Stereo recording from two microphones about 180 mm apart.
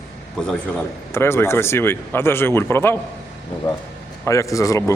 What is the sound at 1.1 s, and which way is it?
A man's voice, 15° left (ahead or behind).